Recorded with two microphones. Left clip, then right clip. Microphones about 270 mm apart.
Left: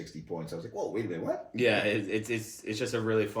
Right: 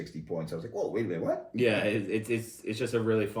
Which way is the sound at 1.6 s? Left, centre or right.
Centre.